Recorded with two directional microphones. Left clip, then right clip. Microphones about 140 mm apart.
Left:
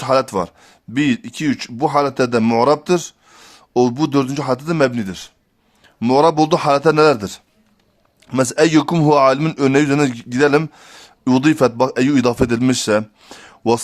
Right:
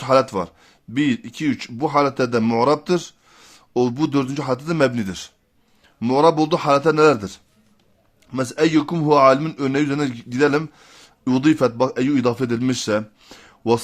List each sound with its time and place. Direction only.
0.0 s speech: 30° left (ahead or behind); by 5.3 s 15° left (ahead or behind)
5.8 s speech: 30° left (ahead or behind)